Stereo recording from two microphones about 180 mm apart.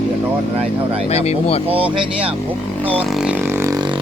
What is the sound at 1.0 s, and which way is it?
Speech, 35° left (ahead or behind).